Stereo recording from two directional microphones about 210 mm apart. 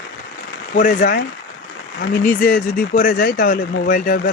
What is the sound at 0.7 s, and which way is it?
Speech, 45° left (ahead or behind).